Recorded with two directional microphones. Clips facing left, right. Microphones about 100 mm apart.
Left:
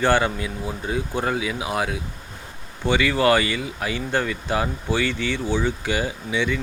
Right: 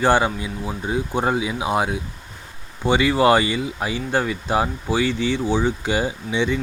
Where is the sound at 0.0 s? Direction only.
15° right (ahead or behind).